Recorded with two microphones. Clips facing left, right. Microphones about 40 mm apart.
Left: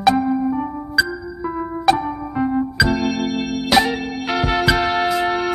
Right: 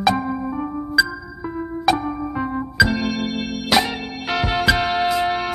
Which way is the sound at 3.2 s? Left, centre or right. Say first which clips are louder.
Left 3 dB; left.